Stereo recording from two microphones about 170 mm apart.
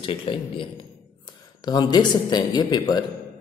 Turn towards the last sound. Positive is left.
turn(degrees=25)  # may be behind; listen again after turning